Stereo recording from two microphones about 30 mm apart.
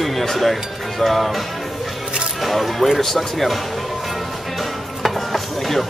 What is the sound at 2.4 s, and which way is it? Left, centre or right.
Speech, centre.